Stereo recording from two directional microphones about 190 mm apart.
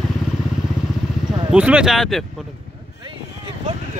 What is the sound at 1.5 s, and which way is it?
Speech, 5° right (ahead or behind).